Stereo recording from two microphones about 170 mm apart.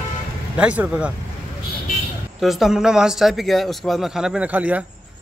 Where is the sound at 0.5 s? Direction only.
5° right (ahead or behind).